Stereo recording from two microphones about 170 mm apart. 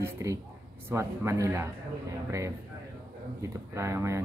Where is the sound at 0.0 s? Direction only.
20° right (ahead or behind).